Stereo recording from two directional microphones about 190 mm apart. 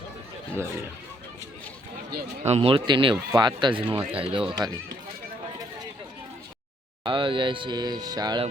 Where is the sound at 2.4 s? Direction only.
35° right (ahead or behind).